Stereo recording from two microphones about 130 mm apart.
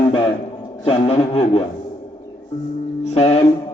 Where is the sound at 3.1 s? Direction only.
55° left (ahead or behind).